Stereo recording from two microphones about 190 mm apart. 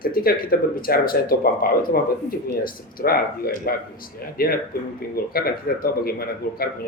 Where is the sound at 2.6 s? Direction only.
50° left (ahead or behind).